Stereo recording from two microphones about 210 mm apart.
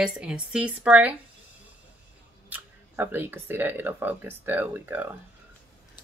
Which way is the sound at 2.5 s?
10° right (ahead or behind).